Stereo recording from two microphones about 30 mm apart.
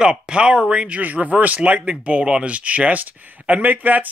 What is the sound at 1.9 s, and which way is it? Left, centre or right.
Speech, right.